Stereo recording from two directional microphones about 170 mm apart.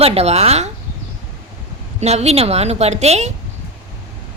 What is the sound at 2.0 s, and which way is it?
A woman's voice, 40° right (ahead or behind).